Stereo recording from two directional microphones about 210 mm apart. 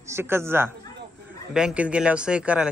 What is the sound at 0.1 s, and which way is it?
Speech, 10° right (ahead or behind).